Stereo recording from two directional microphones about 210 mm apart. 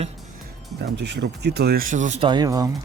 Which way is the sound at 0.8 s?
55° right (ahead or behind).